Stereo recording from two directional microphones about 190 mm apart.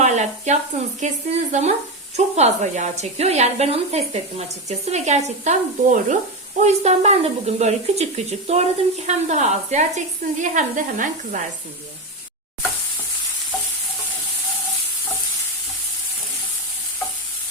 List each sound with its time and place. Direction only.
0.0 s speech: 40° right (ahead or behind)